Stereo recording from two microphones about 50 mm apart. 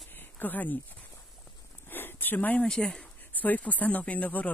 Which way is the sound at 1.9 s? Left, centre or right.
Left.